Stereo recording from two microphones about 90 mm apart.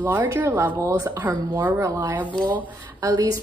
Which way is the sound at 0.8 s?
35° right (ahead or behind).